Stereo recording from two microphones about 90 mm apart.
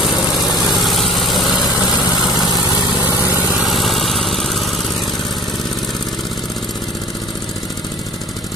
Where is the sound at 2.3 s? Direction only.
45° left (ahead or behind).